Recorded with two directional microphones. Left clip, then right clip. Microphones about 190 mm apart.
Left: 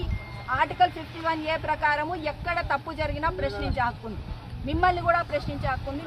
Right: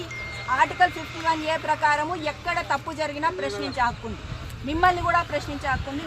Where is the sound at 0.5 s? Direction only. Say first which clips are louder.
Right 2 dB; 15° left (ahead or behind).